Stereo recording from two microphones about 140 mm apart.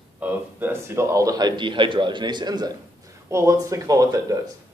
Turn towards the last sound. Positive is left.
turn(degrees=-25)  # may be behind; listen again after turning